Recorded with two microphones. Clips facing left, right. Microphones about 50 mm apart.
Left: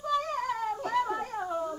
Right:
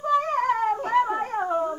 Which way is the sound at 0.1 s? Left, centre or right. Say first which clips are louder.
Right 8 dB; right.